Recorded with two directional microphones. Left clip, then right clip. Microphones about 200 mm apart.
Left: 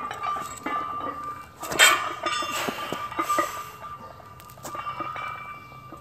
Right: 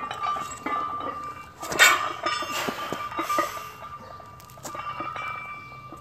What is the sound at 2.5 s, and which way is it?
Music, centre (ahead or behind).